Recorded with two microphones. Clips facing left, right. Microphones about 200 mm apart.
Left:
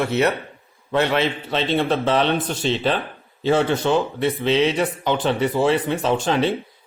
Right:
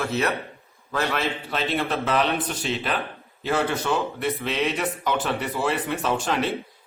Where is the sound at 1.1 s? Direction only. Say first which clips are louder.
Left 5 dB; 30° left (ahead or behind).